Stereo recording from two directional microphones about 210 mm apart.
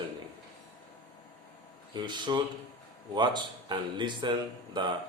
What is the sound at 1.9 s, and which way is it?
Speech, 20° right (ahead or behind).